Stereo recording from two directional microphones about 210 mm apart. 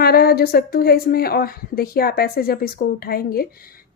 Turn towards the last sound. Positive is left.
turn(degrees=45)  # may be behind; listen again after turning